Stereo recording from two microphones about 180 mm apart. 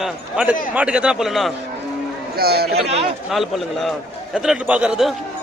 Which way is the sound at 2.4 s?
60° right (ahead or behind).